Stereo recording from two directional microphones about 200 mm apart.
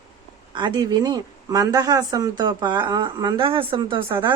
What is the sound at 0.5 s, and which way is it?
Speech, 20° right (ahead or behind).